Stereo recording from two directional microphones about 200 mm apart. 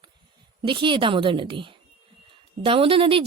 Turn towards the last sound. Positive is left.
turn(degrees=-25)  # may be behind; listen again after turning